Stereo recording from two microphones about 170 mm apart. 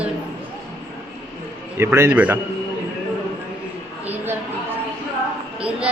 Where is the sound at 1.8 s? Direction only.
15° right (ahead or behind).